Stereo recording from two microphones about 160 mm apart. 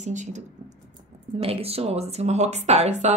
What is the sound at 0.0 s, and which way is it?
Speech, 50° right (ahead or behind).